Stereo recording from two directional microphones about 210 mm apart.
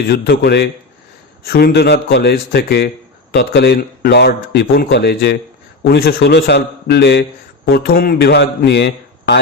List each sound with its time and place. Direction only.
0.1 s a man's voice: 50° left (ahead or behind)